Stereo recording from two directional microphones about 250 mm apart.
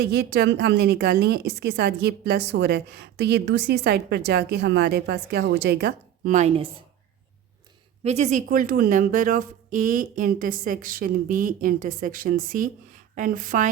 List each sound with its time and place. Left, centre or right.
0.0 s a woman's voice: right
8.0 s a woman's voice: right